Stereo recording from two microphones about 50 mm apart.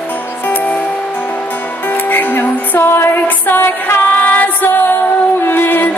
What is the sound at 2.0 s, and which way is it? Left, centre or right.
Music, left.